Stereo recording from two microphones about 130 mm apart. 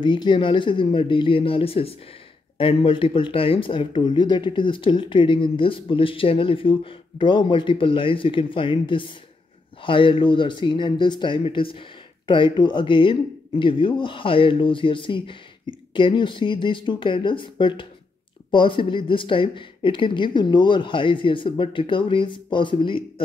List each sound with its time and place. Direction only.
0.0 s speech: 35° left (ahead or behind)